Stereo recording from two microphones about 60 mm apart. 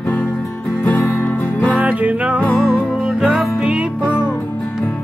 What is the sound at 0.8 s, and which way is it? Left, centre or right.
Music, left.